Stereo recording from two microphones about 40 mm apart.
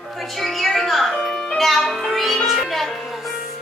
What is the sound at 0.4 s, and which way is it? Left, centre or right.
Music, centre.